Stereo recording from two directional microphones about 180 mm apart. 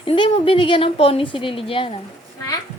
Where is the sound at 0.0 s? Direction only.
30° left (ahead or behind).